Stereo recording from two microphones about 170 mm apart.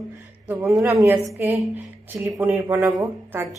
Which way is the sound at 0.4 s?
10° right (ahead or behind).